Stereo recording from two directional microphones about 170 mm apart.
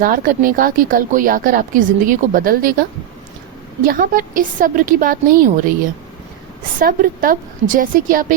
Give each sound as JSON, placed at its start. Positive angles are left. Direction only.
{"t": 0.0, "sound": "a woman's voice", "side_deg": -55}
{"t": 3.8, "sound": "a woman's voice", "side_deg": -55}
{"t": 6.7, "sound": "a woman's voice", "side_deg": -55}